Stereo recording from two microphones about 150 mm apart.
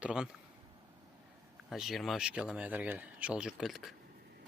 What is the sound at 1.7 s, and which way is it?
Speech, centre (ahead or behind).